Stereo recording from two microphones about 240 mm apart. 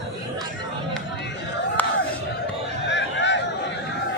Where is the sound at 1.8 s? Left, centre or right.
Centre.